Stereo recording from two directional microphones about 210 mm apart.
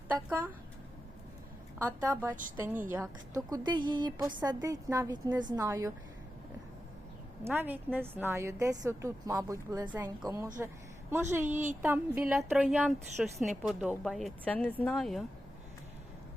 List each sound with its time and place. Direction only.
0.1 s a woman's voice: 10° right (ahead or behind)
1.8 s a woman's voice: 10° right (ahead or behind)
7.4 s a woman's voice: 10° right (ahead or behind)